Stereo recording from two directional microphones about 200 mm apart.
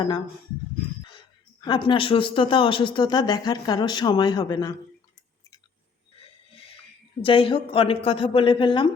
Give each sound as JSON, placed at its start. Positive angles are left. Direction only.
{"t": 1.6, "sound": "speech", "side_deg": 25}
{"t": 7.2, "sound": "speech", "side_deg": 25}